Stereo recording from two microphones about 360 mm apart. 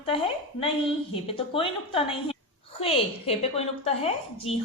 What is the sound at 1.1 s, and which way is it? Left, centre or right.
A woman's voice, centre.